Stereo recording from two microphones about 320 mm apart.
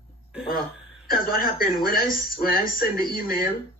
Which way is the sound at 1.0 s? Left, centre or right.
Left.